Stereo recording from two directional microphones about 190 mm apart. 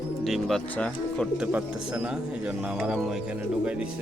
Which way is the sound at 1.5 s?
5° right (ahead or behind).